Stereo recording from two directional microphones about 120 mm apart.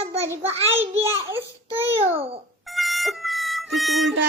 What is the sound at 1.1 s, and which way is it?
Baby cry, 20° right (ahead or behind).